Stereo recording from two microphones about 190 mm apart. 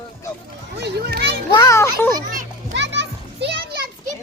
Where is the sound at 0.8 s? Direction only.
60° right (ahead or behind).